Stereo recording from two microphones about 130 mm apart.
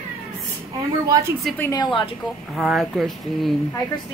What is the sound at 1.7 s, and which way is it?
Speech, 35° left (ahead or behind).